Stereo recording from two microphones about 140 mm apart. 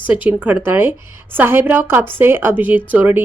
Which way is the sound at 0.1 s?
10° right (ahead or behind).